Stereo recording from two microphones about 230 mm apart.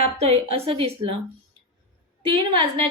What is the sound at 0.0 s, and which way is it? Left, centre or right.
A woman's voice, right.